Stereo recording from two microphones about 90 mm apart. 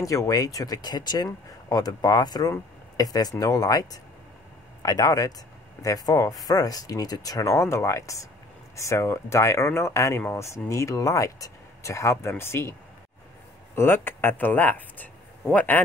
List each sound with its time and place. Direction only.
0.0 s speech: 40° left (ahead or behind)
13.7 s speech: 25° left (ahead or behind)